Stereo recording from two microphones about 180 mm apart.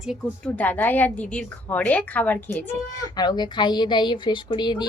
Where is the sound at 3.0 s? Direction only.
20° left (ahead or behind).